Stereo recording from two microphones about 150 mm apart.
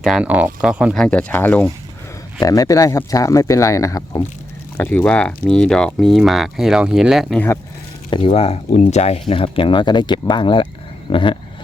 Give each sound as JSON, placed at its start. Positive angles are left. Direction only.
{"t": 0.0, "sound": "speech", "side_deg": -5}
{"t": 0.9, "sound": "speech", "side_deg": 5}
{"t": 2.4, "sound": "speech", "side_deg": 25}
{"t": 4.8, "sound": "speech", "side_deg": 10}
{"t": 7.3, "sound": "speech", "side_deg": 15}
{"t": 8.1, "sound": "speech", "side_deg": 40}